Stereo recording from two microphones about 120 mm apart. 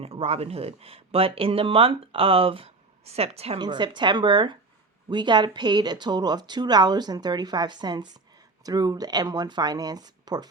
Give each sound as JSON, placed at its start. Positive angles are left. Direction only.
{"t": 0.0, "sound": "speech", "side_deg": -55}
{"t": 3.6, "sound": "a woman's voice", "side_deg": -40}